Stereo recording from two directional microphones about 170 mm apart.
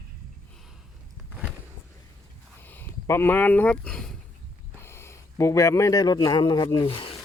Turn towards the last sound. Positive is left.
turn(degrees=30)  # may be behind; listen again after turning